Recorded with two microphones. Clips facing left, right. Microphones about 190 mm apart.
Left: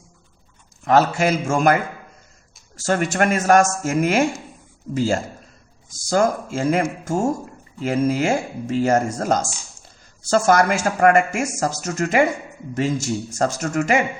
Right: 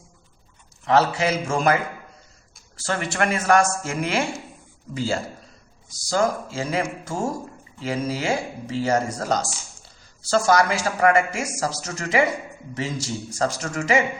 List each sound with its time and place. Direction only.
0.9 s speech: 45° left (ahead or behind)
2.7 s speech: 45° left (ahead or behind)